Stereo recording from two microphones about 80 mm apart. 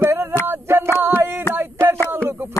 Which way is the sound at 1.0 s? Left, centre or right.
Right.